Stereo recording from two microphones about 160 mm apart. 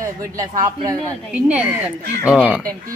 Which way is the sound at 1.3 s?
10° right (ahead or behind).